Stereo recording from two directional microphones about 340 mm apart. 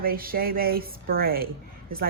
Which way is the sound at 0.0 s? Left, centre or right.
Right.